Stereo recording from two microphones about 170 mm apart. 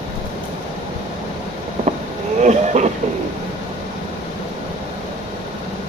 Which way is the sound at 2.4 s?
45° right (ahead or behind).